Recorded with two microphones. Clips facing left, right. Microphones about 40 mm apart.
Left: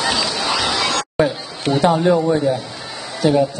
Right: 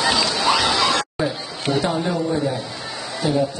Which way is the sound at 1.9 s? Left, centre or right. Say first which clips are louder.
Left 7 dB; centre.